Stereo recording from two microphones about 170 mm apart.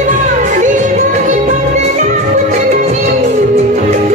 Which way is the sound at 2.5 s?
45° right (ahead or behind).